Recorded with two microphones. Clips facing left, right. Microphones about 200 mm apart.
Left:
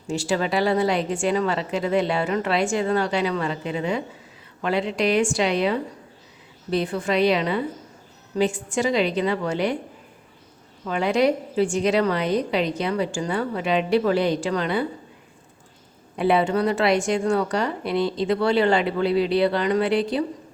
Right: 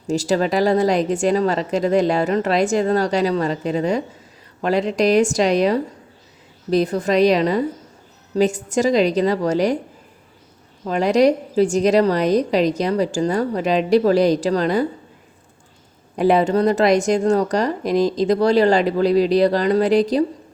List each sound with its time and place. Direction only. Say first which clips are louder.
0.1 s speech: right 5 dB; 40° right (ahead or behind)
10.8 s speech: right 5 dB; 40° right (ahead or behind)
16.1 s speech: right 4 dB; 40° right (ahead or behind)